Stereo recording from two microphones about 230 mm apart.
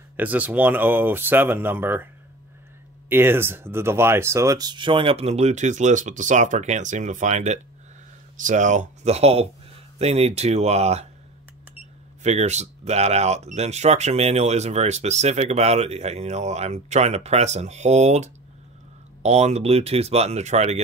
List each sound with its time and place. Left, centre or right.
0.2 s speech: centre
3.1 s speech: centre; by 11.1 s right
12.2 s speech: right